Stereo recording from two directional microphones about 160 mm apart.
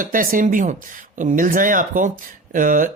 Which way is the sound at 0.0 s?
60° right (ahead or behind).